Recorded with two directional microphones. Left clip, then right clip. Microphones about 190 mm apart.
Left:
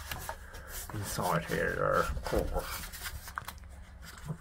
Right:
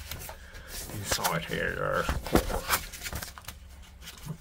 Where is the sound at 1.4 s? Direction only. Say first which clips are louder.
Right 1 dB; 10° right (ahead or behind).